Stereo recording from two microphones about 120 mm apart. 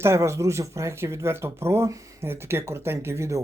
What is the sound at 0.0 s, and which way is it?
Speech, 25° right (ahead or behind).